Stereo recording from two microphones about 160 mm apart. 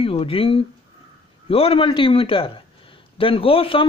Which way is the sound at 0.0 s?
35° left (ahead or behind).